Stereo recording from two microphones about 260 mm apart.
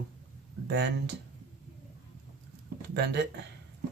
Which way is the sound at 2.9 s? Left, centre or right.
Right.